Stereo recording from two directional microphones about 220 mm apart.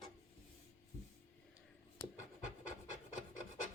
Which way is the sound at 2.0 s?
15° left (ahead or behind).